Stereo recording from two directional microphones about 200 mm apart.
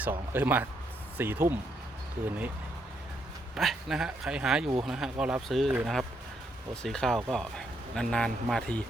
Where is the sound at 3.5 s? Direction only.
Centre (ahead or behind).